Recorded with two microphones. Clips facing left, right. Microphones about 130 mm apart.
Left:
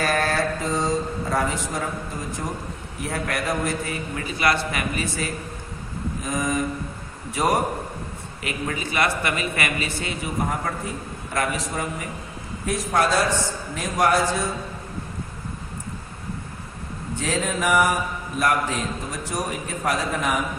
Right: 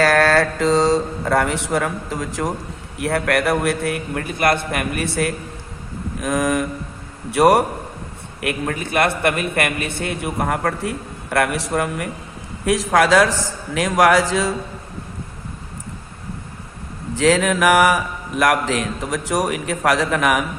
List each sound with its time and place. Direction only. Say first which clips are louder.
0.0 s speech: right 7 dB; 90° right
3.0 s a man's voice: right 8 dB; 65° right (ahead or behind)
6.1 s a sound: right 6 dB; 70° right (ahead or behind)
8.4 s a man's voice: right 5 dB; 55° right (ahead or behind)
12.6 s a man's voice: right 6 dB; 90° right
17.2 s a man's voice: right 9 dB; 90° right; by 20.4 s 75° right (ahead or behind)